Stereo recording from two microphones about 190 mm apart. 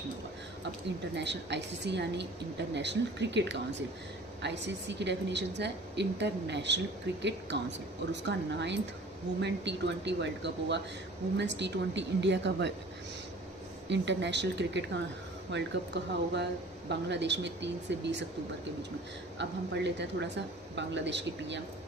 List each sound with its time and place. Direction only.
1.1 s a woman's voice: 65° right (ahead or behind)
13.9 s a woman's voice: 65° right (ahead or behind)
19.4 s speech: 65° right (ahead or behind)